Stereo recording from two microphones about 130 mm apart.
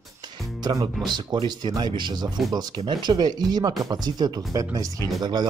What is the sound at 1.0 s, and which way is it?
Speech, 35° right (ahead or behind).